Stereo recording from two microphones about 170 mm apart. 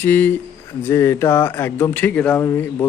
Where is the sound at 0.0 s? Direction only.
10° left (ahead or behind).